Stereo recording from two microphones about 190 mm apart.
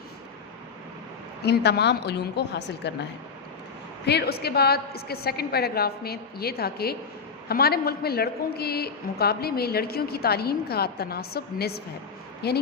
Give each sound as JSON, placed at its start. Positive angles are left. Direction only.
{"t": 1.4, "sound": "a woman's voice", "side_deg": 60}
{"t": 4.0, "sound": "a woman's voice", "side_deg": 60}